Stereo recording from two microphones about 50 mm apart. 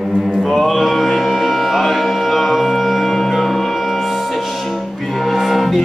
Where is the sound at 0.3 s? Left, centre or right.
Centre.